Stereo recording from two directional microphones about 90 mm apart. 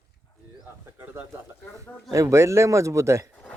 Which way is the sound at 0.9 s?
25° right (ahead or behind).